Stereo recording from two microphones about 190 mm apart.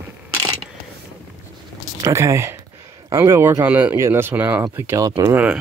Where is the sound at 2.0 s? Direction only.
15° right (ahead or behind).